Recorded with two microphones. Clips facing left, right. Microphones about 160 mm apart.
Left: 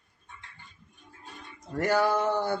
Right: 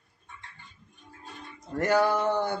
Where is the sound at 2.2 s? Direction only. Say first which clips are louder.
Even; 15° right (ahead or behind).